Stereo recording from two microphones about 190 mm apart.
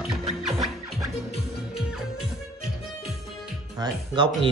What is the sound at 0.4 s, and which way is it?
Scratching, centre (ahead or behind).